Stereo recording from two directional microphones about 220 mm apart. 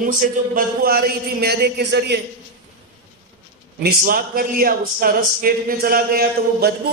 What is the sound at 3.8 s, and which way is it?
A man's voice, 40° right (ahead or behind).